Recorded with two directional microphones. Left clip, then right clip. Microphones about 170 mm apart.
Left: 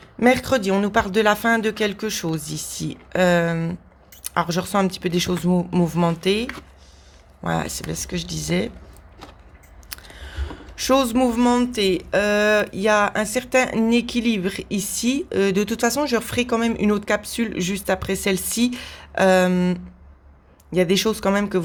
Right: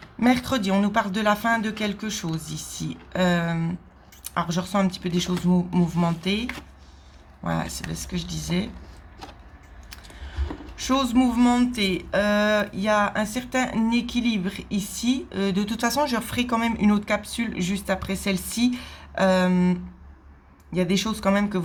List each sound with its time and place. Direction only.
0.2 s speech: 30° left (ahead or behind)
10.8 s speech: 40° left (ahead or behind)